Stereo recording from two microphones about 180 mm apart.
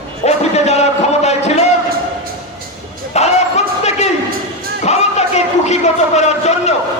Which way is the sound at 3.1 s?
40° left (ahead or behind).